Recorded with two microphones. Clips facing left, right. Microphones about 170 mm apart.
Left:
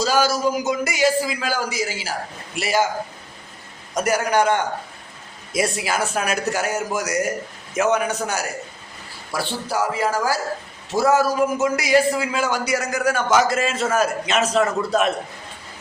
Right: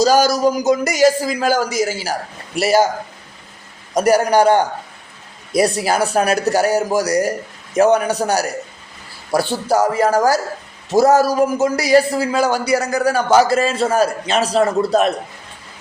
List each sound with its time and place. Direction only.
0.0 s a man's voice: 40° right (ahead or behind)
3.9 s a man's voice: 35° right (ahead or behind)